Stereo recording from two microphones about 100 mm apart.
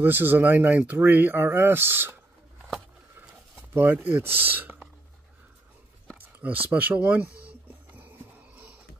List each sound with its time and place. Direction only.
0.0 s speech: 20° right (ahead or behind)
3.7 s speech: 20° right (ahead or behind)
6.1 s a sound: 15° right (ahead or behind)